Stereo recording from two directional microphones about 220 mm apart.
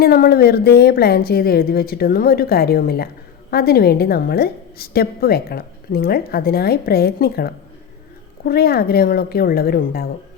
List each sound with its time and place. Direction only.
0.0 s a woman's voice: 45° left (ahead or behind)